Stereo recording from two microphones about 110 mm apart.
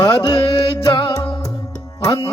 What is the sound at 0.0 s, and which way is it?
Music, 35° left (ahead or behind).